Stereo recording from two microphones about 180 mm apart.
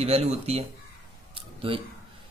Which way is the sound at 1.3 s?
30° right (ahead or behind).